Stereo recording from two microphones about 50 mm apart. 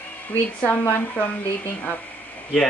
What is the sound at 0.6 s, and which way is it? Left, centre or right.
Speech, left.